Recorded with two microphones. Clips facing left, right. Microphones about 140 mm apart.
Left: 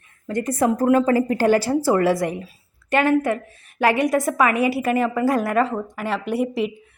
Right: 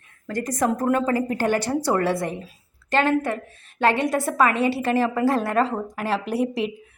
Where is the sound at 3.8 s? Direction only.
25° right (ahead or behind).